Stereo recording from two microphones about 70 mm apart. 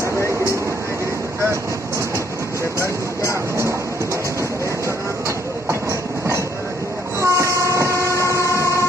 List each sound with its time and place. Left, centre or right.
1.5 s vehicle: right
2.8 s a sound: left
5.7 s train: right
8.4 s train: left